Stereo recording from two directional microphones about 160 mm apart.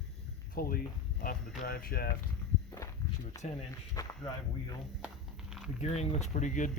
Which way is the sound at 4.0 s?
20° left (ahead or behind).